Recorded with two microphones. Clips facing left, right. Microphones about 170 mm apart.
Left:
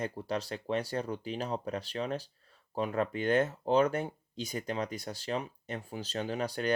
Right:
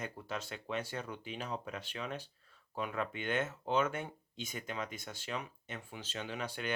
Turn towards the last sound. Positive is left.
turn(degrees=40)  # may be behind; listen again after turning